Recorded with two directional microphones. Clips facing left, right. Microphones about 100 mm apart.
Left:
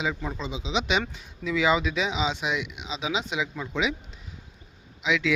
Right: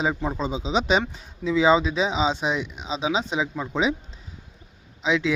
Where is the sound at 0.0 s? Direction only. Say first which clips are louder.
Right 5 dB; 30° right (ahead or behind).